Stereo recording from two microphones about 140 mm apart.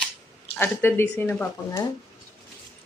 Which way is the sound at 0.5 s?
15° left (ahead or behind).